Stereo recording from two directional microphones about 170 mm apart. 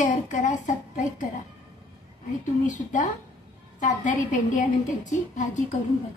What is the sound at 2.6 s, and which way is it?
A woman's voice, 45° left (ahead or behind).